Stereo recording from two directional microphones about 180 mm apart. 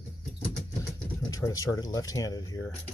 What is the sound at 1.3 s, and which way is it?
Speech, 20° left (ahead or behind).